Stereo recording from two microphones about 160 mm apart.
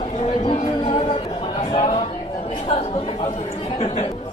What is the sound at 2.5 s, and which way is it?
Chatter, 45° left (ahead or behind).